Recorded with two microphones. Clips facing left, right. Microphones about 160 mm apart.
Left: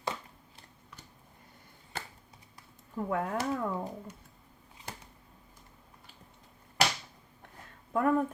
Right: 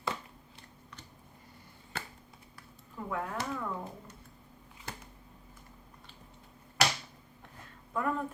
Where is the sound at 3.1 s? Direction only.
40° left (ahead or behind).